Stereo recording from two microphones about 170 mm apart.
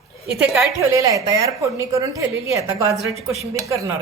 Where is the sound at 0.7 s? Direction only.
20° right (ahead or behind).